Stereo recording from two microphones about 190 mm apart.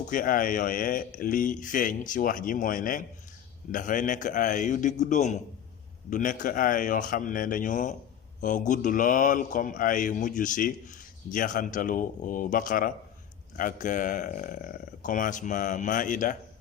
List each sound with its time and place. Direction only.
0.1 s speech: 45° left (ahead or behind)